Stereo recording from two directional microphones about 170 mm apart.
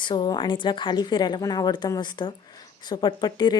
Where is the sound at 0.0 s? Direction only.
25° left (ahead or behind).